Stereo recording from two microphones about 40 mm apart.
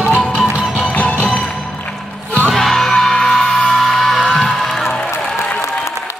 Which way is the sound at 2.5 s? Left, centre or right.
Centre.